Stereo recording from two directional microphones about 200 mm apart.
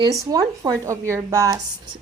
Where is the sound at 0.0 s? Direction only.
20° right (ahead or behind).